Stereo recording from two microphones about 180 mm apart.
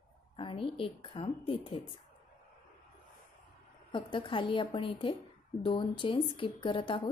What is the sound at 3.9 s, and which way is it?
Speech, 30° left (ahead or behind).